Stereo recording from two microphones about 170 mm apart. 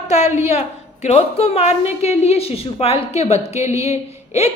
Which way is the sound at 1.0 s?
40° left (ahead or behind).